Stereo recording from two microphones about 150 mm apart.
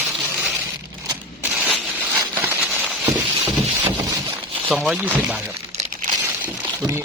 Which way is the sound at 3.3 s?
40° right (ahead or behind).